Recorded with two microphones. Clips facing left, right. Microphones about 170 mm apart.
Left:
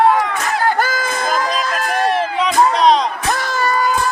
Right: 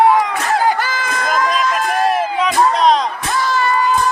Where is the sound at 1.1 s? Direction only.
30° left (ahead or behind).